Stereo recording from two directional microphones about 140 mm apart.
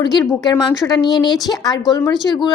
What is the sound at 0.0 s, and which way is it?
A woman's voice, 30° left (ahead or behind).